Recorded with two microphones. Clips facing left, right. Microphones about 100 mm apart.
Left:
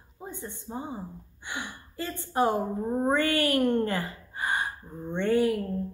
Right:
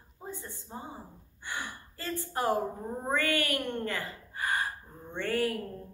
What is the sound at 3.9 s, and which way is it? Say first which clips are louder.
Gasp: left 5 dB; 25° left (ahead or behind).